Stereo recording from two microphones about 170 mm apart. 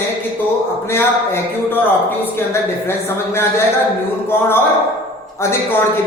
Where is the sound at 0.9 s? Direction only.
15° left (ahead or behind).